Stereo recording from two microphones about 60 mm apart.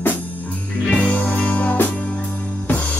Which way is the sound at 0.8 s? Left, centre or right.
Centre.